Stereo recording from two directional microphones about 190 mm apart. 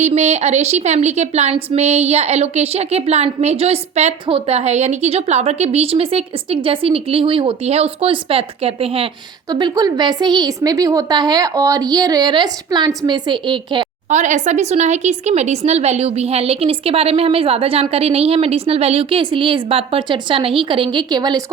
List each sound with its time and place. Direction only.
0.0 s a woman's voice: 35° right (ahead or behind)
14.1 s a woman's voice: 40° right (ahead or behind); by 21.4 s 20° right (ahead or behind)